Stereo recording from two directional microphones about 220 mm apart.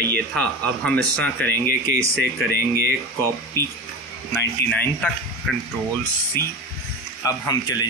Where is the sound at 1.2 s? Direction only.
10° left (ahead or behind).